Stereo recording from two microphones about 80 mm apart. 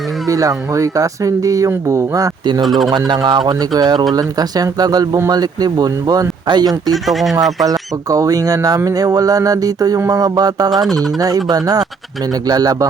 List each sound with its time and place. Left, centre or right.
0.3 s speech: right
2.6 s speech: centre
3.2 s speech: right
6.9 s speech: centre
7.6 s speech: right